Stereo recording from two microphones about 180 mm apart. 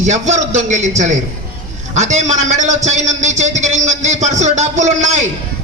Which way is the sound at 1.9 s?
40° right (ahead or behind).